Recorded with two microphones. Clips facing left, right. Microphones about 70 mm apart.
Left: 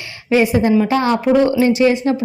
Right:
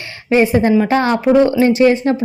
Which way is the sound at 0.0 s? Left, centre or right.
Right.